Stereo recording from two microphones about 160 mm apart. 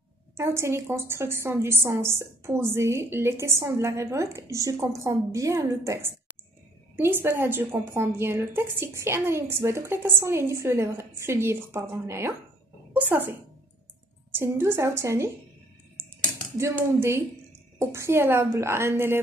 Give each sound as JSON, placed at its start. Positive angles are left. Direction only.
{"t": 0.4, "sound": "a woman's voice", "side_deg": -15}
{"t": 14.3, "sound": "a woman's voice", "side_deg": -15}
{"t": 16.5, "sound": "a woman's voice", "side_deg": -15}